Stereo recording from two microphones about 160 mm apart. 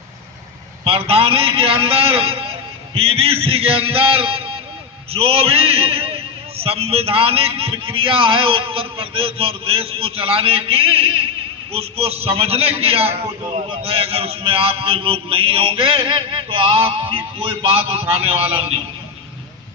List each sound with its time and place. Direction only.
0.9 s a man's voice: 35° right (ahead or behind)